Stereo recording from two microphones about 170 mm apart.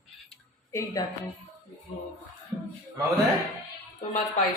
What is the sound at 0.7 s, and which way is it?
Speech, 15° left (ahead or behind).